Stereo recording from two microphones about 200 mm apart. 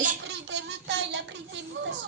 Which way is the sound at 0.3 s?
60° right (ahead or behind).